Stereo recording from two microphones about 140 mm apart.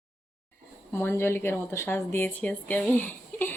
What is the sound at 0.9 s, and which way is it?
Speech, 15° left (ahead or behind).